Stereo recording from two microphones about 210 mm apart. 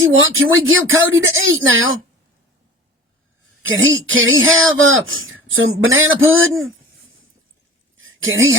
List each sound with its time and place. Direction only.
0.0 s a man's voice: 70° right (ahead or behind)
3.6 s a man's voice: 65° right (ahead or behind)
7.9 s a sound: 70° right (ahead or behind)